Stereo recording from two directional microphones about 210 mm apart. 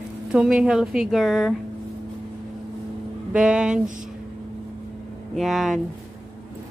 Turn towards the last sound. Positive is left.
turn(degrees=0)  # may be behind; listen again after turning